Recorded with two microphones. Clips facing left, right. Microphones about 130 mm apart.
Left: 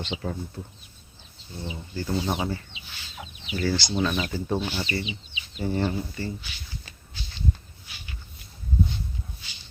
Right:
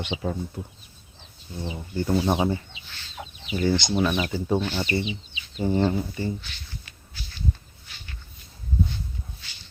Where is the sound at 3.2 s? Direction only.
25° right (ahead or behind).